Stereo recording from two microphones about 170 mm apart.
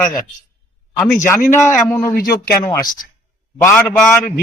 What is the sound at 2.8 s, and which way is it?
Speech, 55° left (ahead or behind).